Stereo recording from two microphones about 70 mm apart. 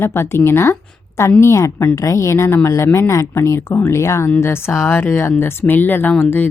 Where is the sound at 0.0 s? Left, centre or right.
Left.